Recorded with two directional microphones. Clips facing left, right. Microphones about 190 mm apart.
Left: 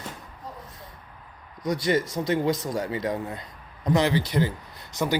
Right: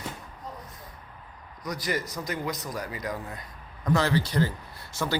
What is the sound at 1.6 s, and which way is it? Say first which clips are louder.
Speech: left 7 dB; 25° left (ahead or behind).